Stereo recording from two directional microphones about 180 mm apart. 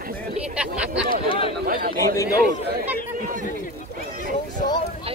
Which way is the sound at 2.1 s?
15° left (ahead or behind).